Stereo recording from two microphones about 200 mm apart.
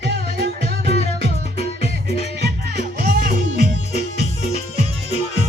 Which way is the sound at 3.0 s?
45° right (ahead or behind).